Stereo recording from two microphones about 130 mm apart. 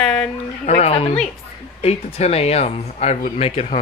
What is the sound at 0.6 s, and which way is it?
Speech, 55° left (ahead or behind).